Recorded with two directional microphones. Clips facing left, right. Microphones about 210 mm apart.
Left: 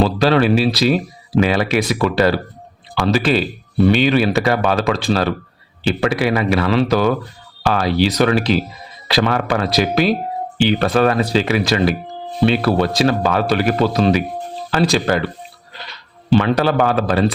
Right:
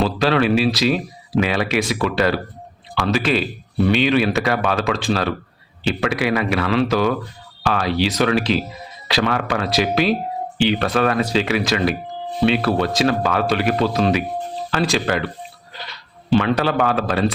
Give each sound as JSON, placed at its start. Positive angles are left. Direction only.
{"t": 0.0, "sound": "speech", "side_deg": 35}
{"t": 16.4, "sound": "speech", "side_deg": 35}